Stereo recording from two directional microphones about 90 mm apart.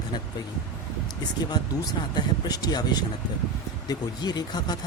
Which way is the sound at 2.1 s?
45° left (ahead or behind).